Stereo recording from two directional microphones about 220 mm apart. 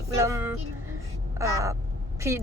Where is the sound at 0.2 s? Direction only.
10° right (ahead or behind).